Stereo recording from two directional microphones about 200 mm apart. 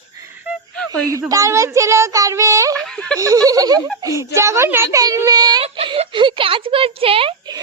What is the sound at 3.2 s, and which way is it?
A woman's voice, 15° right (ahead or behind).